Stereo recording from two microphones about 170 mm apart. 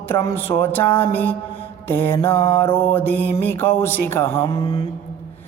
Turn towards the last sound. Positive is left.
turn(degrees=35)  # may be behind; listen again after turning